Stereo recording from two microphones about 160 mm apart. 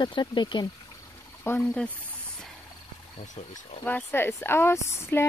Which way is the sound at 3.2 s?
40° left (ahead or behind).